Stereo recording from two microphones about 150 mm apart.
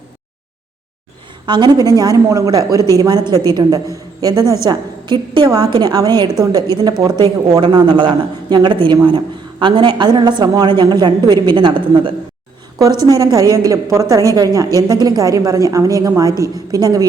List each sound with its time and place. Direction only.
1.5 s a woman's voice: 30° right (ahead or behind)